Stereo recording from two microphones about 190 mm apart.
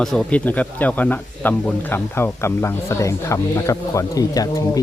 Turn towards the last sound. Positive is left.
turn(degrees=20)  # may be behind; listen again after turning